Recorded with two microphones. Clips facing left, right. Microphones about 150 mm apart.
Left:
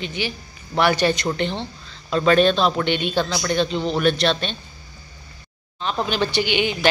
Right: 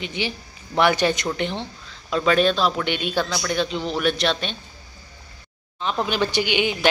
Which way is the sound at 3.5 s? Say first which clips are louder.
Left 3 dB; 10° right (ahead or behind).